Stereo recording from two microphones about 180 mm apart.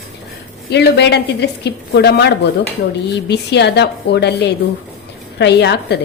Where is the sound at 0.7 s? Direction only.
70° left (ahead or behind).